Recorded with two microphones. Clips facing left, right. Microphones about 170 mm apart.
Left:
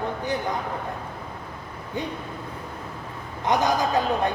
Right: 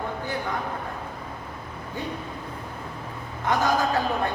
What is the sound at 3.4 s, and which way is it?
Speech, 20° left (ahead or behind).